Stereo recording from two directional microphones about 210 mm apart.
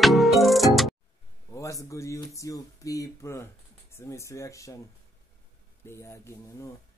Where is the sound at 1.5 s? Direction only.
15° left (ahead or behind).